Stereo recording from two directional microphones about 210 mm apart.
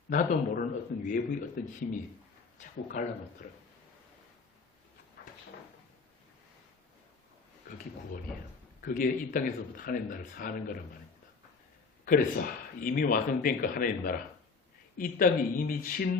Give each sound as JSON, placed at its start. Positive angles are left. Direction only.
{"t": 0.1, "sound": "a man's voice", "side_deg": 40}
{"t": 8.8, "sound": "speech", "side_deg": 45}
{"t": 12.0, "sound": "a man's voice", "side_deg": 40}